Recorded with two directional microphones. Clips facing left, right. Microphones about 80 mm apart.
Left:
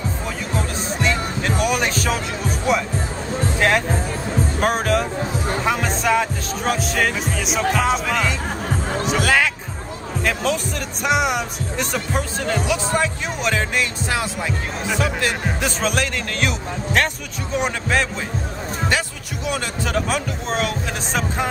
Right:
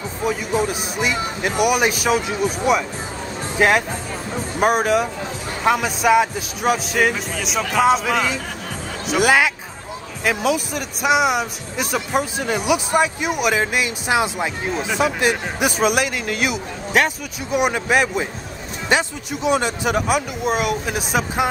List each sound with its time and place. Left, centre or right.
0.2 s music: centre
3.5 s speech: centre
9.2 s music: centre
10.2 s speech: centre